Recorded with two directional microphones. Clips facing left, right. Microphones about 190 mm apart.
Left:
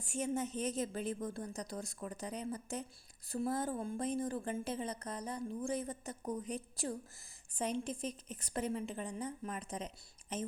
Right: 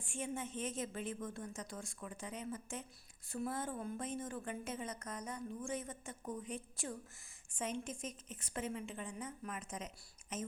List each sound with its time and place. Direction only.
0.0 s a woman's voice: 40° left (ahead or behind)